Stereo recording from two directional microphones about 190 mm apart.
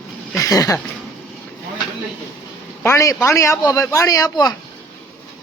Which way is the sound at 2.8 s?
15° left (ahead or behind).